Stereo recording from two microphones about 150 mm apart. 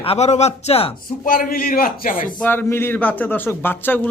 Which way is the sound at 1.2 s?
70° left (ahead or behind).